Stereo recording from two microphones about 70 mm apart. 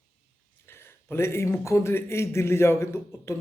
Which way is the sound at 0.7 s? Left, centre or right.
Left.